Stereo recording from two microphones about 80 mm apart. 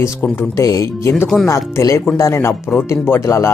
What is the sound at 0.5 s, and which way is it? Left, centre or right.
Speech, left.